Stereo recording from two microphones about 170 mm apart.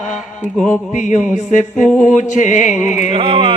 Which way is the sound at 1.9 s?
10° left (ahead or behind).